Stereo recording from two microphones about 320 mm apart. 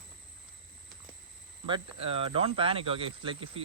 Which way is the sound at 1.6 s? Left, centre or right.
Centre.